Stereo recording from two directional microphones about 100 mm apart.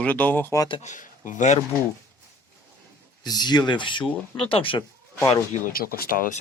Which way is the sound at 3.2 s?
45° left (ahead or behind).